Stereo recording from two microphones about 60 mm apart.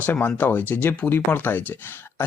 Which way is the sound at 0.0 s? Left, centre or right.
Left.